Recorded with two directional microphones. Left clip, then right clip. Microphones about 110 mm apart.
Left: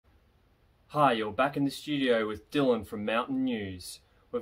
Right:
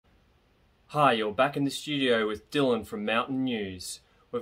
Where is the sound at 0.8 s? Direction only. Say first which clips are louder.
Right 2 dB; 35° right (ahead or behind).